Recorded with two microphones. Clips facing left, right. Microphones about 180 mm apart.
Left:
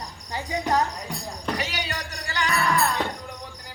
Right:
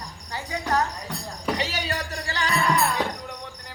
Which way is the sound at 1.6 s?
35° right (ahead or behind).